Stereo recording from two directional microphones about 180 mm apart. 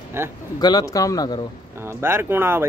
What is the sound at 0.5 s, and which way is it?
Speech, 20° left (ahead or behind).